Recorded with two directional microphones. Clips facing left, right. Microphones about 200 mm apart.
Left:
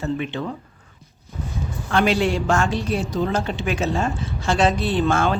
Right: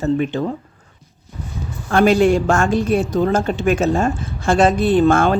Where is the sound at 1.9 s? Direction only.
45° right (ahead or behind).